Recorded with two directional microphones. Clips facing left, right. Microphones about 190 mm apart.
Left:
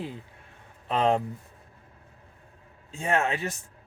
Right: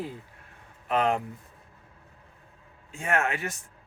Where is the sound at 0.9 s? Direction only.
25° left (ahead or behind).